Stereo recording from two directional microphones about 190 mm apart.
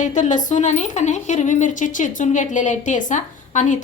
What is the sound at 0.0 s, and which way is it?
Speech, 40° left (ahead or behind).